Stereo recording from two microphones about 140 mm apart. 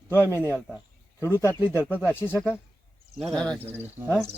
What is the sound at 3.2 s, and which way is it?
Speech, 5° left (ahead or behind).